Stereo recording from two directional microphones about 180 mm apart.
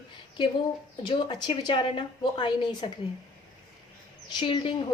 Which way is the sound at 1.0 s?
25° left (ahead or behind).